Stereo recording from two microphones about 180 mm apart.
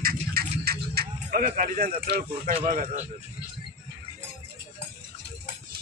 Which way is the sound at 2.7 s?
45° right (ahead or behind).